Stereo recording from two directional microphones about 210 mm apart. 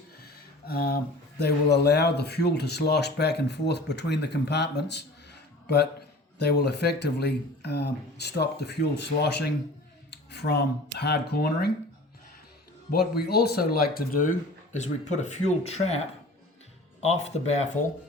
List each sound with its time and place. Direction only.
0.7 s speech: 45° left (ahead or behind)
12.9 s speech: 50° left (ahead or behind); by 16.0 s 30° left (ahead or behind)
17.0 s speech: 30° left (ahead or behind)